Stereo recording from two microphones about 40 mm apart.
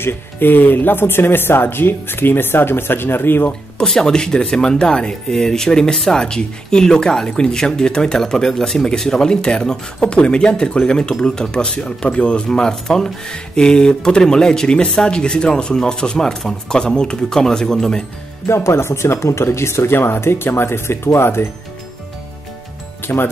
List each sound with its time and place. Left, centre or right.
0.0 s speech: left
3.8 s speech: centre
12.4 s speech: centre
18.5 s speech: left
23.0 s speech: left